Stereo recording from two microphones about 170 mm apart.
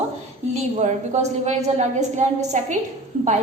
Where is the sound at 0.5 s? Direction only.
45° right (ahead or behind).